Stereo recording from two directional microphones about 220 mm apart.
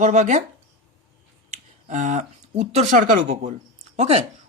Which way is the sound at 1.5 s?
35° right (ahead or behind).